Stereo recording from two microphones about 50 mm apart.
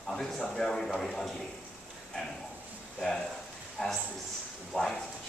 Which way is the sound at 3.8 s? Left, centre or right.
Centre.